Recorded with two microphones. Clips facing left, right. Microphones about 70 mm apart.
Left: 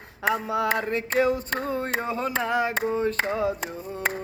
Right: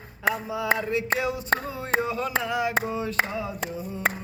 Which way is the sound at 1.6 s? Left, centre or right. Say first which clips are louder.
Left 6 dB; left.